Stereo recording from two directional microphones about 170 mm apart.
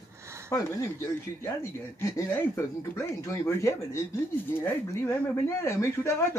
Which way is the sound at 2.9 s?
15° left (ahead or behind).